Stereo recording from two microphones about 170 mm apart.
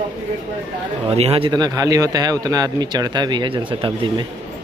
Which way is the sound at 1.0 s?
35° right (ahead or behind).